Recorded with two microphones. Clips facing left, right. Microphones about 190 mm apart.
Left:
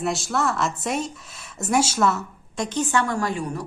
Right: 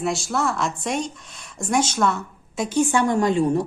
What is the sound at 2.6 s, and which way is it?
A woman's voice, 10° right (ahead or behind).